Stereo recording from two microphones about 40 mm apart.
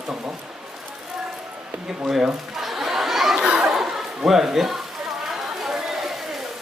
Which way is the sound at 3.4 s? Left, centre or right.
Centre.